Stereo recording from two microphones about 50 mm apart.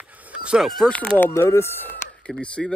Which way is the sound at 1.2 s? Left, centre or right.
Left.